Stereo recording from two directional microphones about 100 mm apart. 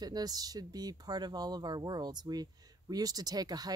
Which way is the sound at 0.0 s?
40° right (ahead or behind).